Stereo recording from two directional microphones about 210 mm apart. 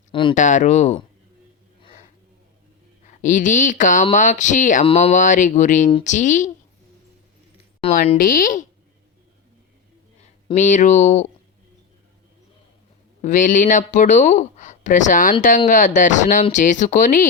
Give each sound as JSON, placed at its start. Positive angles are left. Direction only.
{"t": 0.1, "sound": "a sound", "side_deg": 25}
{"t": 0.3, "sound": "speech", "side_deg": 35}
{"t": 3.0, "sound": "speech", "side_deg": 35}
{"t": 7.8, "sound": "a woman's voice", "side_deg": 30}
{"t": 8.2, "sound": "speech", "side_deg": 40}
{"t": 10.2, "sound": "speech", "side_deg": 35}
{"t": 13.2, "sound": "speech", "side_deg": 35}